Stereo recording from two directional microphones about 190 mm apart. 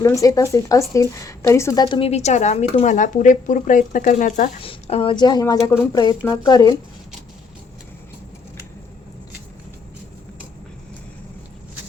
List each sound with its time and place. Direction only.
0.0 s a woman's voice: 15° left (ahead or behind); by 4.7 s 40° left (ahead or behind)
4.7 s a woman's voice: 30° left (ahead or behind)